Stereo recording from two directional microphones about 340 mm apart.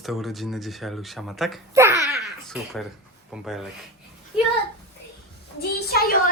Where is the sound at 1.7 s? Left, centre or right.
Centre.